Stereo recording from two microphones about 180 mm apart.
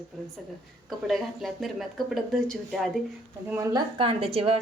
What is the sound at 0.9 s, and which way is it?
Speech, centre (ahead or behind).